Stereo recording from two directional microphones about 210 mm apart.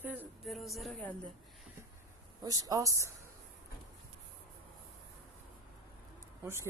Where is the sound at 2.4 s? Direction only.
15° right (ahead or behind).